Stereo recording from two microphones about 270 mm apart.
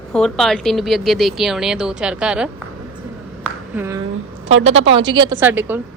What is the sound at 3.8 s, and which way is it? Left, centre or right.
Speech, centre.